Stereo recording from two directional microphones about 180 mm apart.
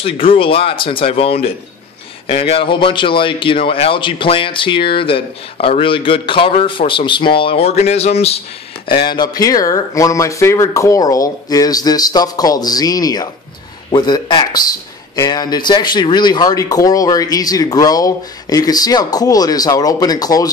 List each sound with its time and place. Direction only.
0.0 s speech: 30° left (ahead or behind)
9.0 s speech: 25° left (ahead or behind)